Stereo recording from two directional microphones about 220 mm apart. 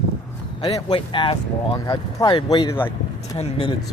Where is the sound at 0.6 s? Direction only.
20° left (ahead or behind).